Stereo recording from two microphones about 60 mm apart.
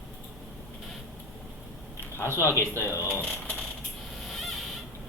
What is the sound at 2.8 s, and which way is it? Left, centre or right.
Speech, left.